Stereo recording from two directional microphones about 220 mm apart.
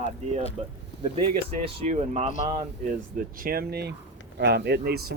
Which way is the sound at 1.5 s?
30° right (ahead or behind).